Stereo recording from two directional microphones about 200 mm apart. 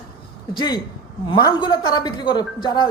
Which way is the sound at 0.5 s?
20° left (ahead or behind).